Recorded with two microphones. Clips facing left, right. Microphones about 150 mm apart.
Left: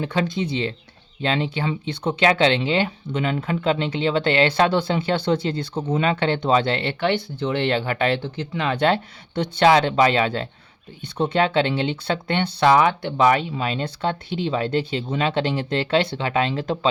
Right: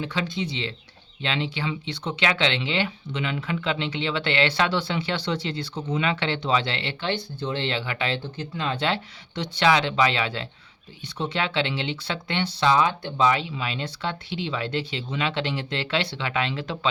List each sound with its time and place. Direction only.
0.0 s speech: 45° left (ahead or behind)
7.0 s speech: 85° left
8.8 s speech: 55° left (ahead or behind)
9.6 s speech: 40° left (ahead or behind)